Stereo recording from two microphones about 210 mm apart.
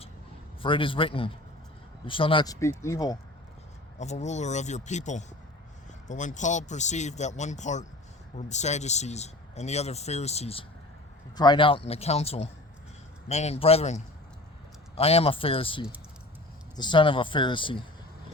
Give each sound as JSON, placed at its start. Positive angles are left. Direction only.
{"t": 0.6, "sound": "a man's voice", "side_deg": 25}
{"t": 3.9, "sound": "a man's voice", "side_deg": 35}